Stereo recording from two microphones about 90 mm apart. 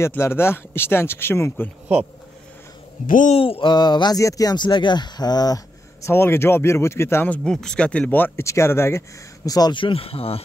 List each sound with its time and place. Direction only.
0.2 s speech: 25° left (ahead or behind)
3.3 s speech: 90° left
3.7 s speech: 55° left (ahead or behind)
4.2 s speech: 40° left (ahead or behind)
6.0 s speech: 25° left (ahead or behind)
7.2 s speech: 10° left (ahead or behind); by 9.0 s 30° left (ahead or behind)
9.5 s speech: 45° left (ahead or behind)
9.8 s speech: 80° left